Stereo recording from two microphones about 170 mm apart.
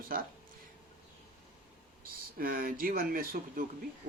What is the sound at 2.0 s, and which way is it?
Speech, 55° right (ahead or behind).